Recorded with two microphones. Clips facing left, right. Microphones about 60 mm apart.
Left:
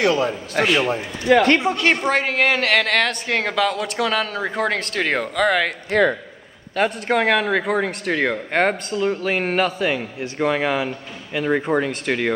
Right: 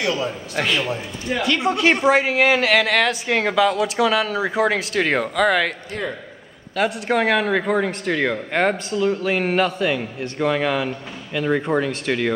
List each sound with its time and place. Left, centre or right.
0.0 s a man's voice: left
1.3 s speech: left
1.6 s a man's voice: centre
5.9 s a man's voice: left
6.8 s a man's voice: centre